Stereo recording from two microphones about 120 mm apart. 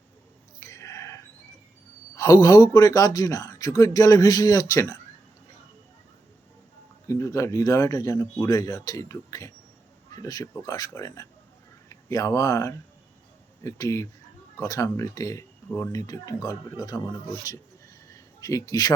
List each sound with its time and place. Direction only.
0.6 s a sound: 25° left (ahead or behind)
2.1 s speech: 25° left (ahead or behind)
7.1 s speech: 25° left (ahead or behind)
18.1 s speech: 30° left (ahead or behind)